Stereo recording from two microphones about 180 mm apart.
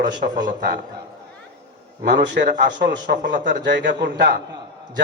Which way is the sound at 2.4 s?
65° right (ahead or behind).